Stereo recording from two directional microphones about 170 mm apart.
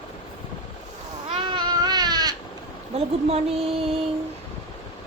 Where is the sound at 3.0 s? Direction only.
35° right (ahead or behind).